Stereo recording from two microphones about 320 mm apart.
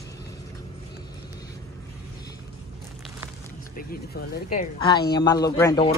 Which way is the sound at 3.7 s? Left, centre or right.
Left.